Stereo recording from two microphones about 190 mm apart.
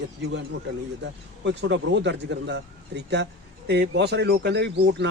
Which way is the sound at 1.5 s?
65° right (ahead or behind).